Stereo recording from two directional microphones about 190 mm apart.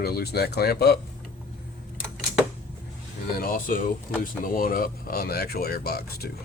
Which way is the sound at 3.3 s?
50° left (ahead or behind).